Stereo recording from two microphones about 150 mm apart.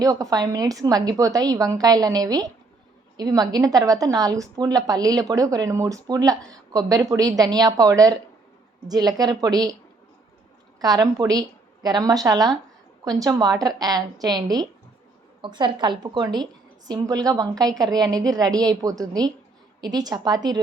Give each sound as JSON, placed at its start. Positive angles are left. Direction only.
{"t": 0.0, "sound": "a woman's voice", "side_deg": -25}
{"t": 10.8, "sound": "a woman's voice", "side_deg": -25}